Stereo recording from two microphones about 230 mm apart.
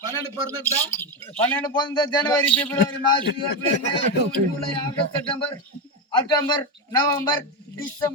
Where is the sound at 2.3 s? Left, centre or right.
Centre.